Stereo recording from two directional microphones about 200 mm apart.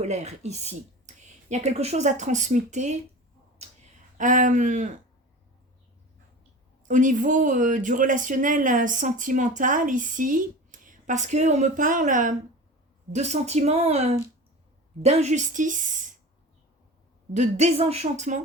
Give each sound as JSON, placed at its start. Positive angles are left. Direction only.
{"t": 0.0, "sound": "speech", "side_deg": -35}
{"t": 4.2, "sound": "speech", "side_deg": -40}
{"t": 6.8, "sound": "speech", "side_deg": -40}
{"t": 17.3, "sound": "speech", "side_deg": -35}